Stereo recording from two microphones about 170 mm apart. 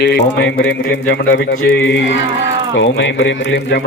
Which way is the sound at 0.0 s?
85° left.